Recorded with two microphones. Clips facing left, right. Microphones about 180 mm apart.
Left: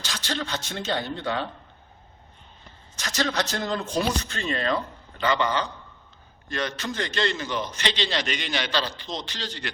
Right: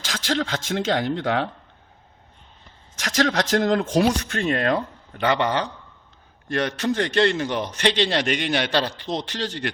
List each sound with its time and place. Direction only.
0.0 s speech: 90° right
3.0 s speech: 90° right
4.4 s a man's voice: 60° right (ahead or behind)